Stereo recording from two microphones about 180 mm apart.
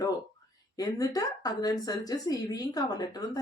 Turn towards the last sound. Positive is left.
turn(degrees=20)  # may be behind; listen again after turning